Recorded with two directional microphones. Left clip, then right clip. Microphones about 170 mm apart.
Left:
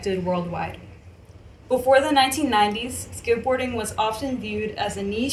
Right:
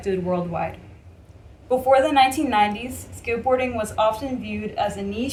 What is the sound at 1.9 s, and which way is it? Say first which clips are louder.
Speech: right 1 dB; 20° right (ahead or behind).